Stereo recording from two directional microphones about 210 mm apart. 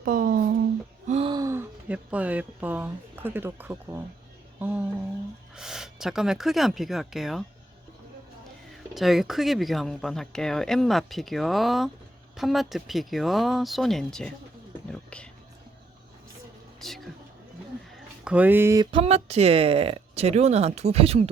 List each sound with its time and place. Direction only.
0.0 s a sound: 40° right (ahead or behind)
1.0 s gasp: 30° right (ahead or behind)
1.3 s speech: 15° right (ahead or behind)
8.7 s speech: centre (ahead or behind)
14.8 s whispering: 5° left (ahead or behind)
18.3 s speech: 10° right (ahead or behind)
18.9 s speech: 25° right (ahead or behind)